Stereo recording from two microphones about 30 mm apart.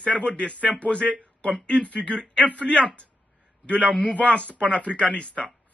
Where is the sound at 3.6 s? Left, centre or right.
Left.